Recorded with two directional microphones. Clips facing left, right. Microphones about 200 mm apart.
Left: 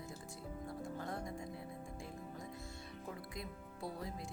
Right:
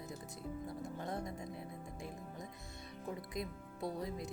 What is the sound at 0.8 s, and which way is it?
Speech, 20° right (ahead or behind).